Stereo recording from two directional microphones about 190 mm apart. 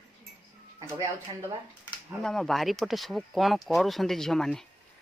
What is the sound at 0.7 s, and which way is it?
Speech, 15° right (ahead or behind).